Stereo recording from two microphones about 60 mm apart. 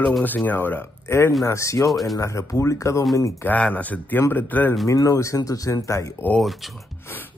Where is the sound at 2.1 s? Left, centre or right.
Left.